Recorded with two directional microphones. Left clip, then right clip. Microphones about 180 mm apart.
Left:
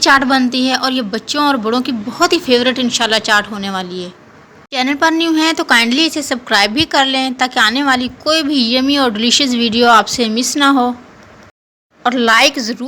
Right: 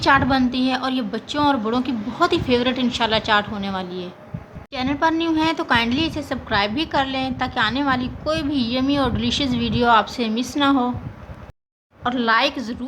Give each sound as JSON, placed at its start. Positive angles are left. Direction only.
{"t": 0.0, "sound": "a woman's voice", "side_deg": 20}
{"t": 12.0, "sound": "a woman's voice", "side_deg": 25}